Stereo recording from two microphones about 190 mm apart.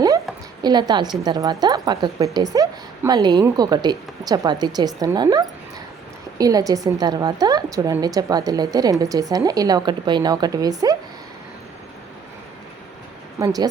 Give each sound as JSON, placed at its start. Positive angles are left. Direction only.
{"t": 0.6, "sound": "a woman's voice", "side_deg": -20}
{"t": 13.4, "sound": "a woman's voice", "side_deg": -20}